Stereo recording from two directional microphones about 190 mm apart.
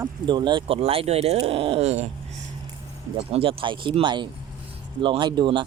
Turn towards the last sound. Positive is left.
turn(degrees=-25)  # may be behind; listen again after turning